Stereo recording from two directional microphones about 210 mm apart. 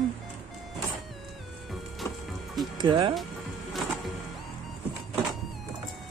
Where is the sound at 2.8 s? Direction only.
20° right (ahead or behind).